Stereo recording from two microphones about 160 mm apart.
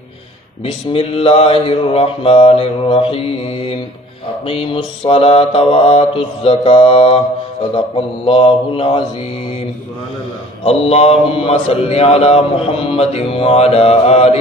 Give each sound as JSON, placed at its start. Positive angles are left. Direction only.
{"t": 0.7, "sound": "a man's voice", "side_deg": 35}
{"t": 8.3, "sound": "a man's voice", "side_deg": 35}
{"t": 10.6, "sound": "a man's voice", "side_deg": 40}